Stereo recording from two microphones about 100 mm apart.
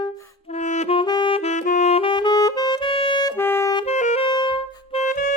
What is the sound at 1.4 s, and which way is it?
Saxophone, 85° left.